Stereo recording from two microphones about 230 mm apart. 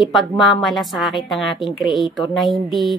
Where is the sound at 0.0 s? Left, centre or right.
Centre.